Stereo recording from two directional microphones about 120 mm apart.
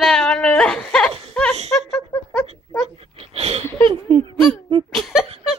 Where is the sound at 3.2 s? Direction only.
60° right (ahead or behind).